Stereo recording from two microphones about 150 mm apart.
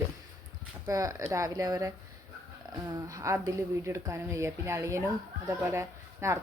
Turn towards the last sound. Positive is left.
turn(degrees=-20)  # may be behind; listen again after turning